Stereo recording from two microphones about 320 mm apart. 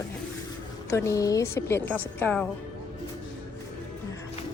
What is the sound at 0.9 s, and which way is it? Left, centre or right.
A woman's voice, centre.